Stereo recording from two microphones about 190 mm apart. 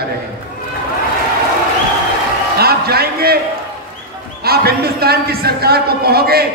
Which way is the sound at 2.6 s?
55° right (ahead or behind).